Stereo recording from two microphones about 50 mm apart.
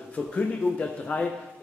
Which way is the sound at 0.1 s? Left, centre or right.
Left.